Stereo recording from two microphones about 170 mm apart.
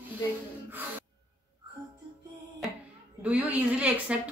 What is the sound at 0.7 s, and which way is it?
Gasp, 10° right (ahead or behind).